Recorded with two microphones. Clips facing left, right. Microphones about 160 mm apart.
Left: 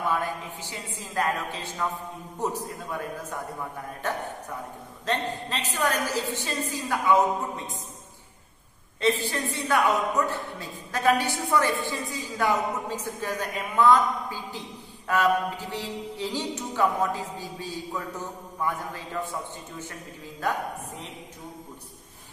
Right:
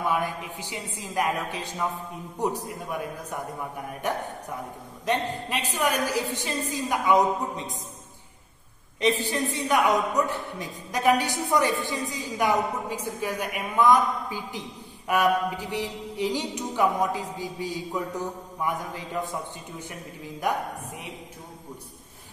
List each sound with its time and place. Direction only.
0.0 s a woman's voice: 15° right (ahead or behind)
9.2 s a woman's voice: 15° right (ahead or behind)